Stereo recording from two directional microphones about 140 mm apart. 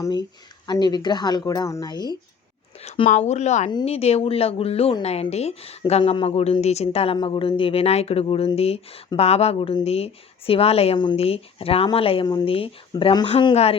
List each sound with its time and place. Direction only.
0.0 s speech: 30° left (ahead or behind)
3.2 s a woman's voice: 55° left (ahead or behind)
10.9 s speech: 30° left (ahead or behind)
11.2 s a woman's voice: 45° left (ahead or behind)